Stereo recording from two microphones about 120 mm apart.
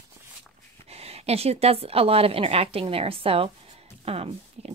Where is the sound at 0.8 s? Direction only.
55° right (ahead or behind).